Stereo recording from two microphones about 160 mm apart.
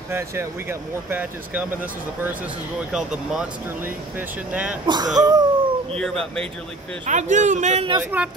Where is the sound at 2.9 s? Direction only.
5° right (ahead or behind).